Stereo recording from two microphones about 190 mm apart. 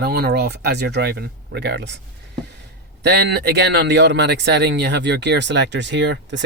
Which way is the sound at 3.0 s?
60° right (ahead or behind).